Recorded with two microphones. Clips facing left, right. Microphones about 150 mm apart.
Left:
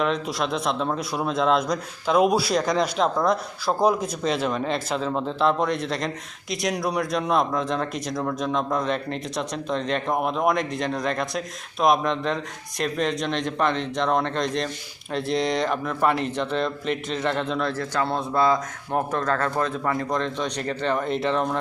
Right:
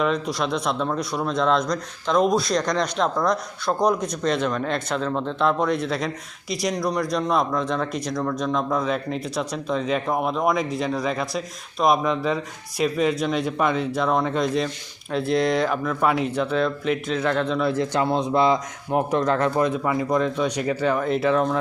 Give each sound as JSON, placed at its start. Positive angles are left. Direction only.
{"t": 0.0, "sound": "speech", "side_deg": 0}
{"t": 17.7, "sound": "speech", "side_deg": -15}